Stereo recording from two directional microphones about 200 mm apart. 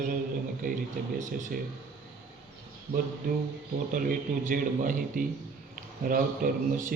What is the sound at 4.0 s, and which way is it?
A man's voice, 40° right (ahead or behind).